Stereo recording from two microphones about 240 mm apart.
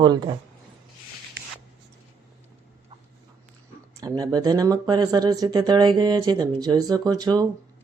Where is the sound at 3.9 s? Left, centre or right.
Centre.